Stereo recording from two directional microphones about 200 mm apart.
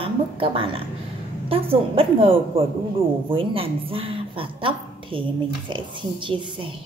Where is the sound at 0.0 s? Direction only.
25° right (ahead or behind).